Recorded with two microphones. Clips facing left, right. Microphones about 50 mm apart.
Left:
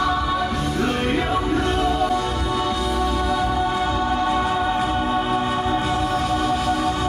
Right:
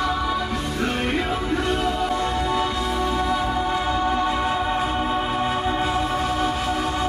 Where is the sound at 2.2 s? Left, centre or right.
Right.